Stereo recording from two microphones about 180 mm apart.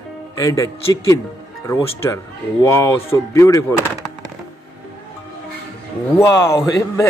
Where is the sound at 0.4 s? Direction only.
20° left (ahead or behind).